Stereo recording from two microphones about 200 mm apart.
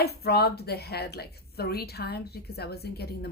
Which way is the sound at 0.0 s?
55° left (ahead or behind).